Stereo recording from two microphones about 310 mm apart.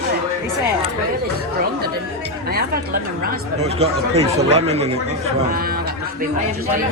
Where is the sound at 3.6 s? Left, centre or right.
Centre.